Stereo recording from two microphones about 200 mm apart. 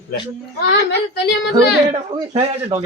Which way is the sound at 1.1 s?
55° left (ahead or behind).